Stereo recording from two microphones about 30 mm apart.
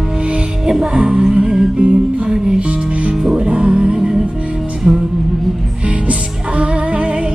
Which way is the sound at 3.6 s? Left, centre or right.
Right.